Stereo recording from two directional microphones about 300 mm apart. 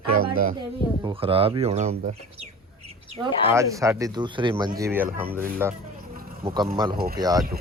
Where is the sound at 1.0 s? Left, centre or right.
Centre.